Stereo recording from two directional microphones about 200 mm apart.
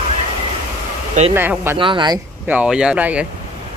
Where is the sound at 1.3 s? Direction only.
10° right (ahead or behind).